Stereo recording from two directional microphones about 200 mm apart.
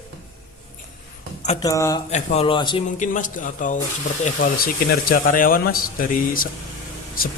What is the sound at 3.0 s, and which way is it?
Speech, 40° left (ahead or behind).